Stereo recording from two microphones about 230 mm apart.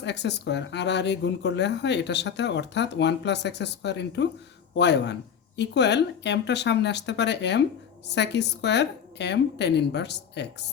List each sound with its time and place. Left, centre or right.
0.0 s speech: left